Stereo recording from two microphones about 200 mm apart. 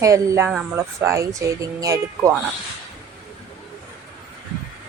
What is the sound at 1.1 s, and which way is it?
Speech, 15° right (ahead or behind).